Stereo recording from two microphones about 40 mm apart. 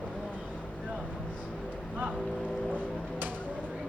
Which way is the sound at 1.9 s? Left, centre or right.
Right.